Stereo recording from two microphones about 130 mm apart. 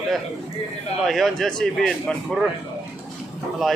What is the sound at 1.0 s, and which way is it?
A man's voice, centre (ahead or behind).